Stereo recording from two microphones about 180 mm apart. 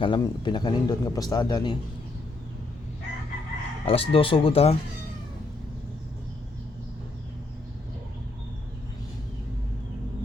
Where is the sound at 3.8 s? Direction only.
30° left (ahead or behind).